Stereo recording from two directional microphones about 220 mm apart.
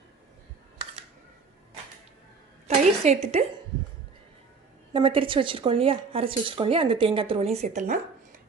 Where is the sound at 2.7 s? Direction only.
30° right (ahead or behind).